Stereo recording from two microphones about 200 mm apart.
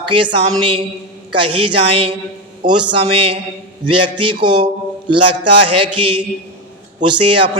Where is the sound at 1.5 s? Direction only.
25° right (ahead or behind).